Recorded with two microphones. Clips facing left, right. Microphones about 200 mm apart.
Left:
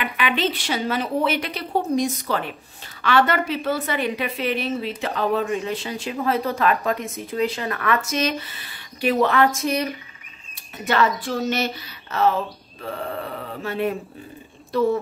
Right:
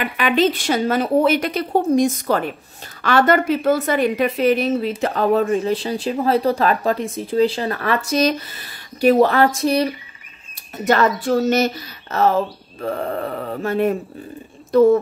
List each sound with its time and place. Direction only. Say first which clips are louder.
0.0 s a woman's voice: right 6 dB; 45° right (ahead or behind)
10.9 s a woman's voice: right 5 dB; 45° right (ahead or behind)